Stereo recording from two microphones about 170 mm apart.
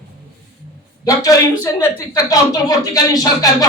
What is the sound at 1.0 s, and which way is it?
A woman's voice, 20° left (ahead or behind).